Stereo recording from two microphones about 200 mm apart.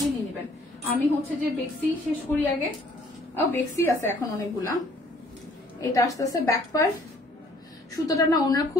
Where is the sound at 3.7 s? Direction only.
15° left (ahead or behind).